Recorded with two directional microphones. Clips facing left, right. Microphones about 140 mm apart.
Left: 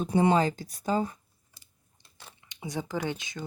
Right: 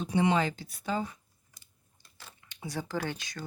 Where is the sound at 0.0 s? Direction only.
45° left (ahead or behind).